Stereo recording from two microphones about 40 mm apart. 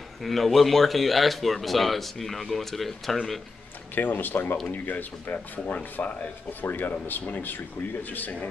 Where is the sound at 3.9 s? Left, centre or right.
Left.